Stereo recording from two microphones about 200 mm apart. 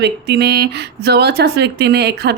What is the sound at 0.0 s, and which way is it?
Speech, 55° right (ahead or behind).